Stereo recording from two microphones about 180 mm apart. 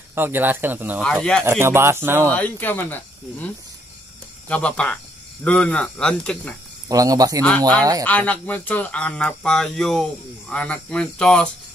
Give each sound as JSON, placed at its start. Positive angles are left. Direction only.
{"t": 0.1, "sound": "speech", "side_deg": -10}
{"t": 1.0, "sound": "speech", "side_deg": 5}
{"t": 1.4, "sound": "speech", "side_deg": -15}
{"t": 2.3, "sound": "speech", "side_deg": 10}
{"t": 6.9, "sound": "speech", "side_deg": -20}
{"t": 8.0, "sound": "speech", "side_deg": 10}